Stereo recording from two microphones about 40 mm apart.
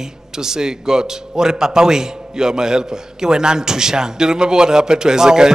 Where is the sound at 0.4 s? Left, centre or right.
Centre.